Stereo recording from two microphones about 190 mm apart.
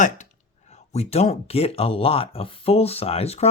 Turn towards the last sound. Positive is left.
turn(degrees=30)  # may be behind; listen again after turning